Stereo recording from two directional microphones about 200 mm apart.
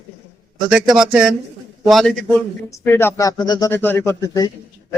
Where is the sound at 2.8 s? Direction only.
10° left (ahead or behind).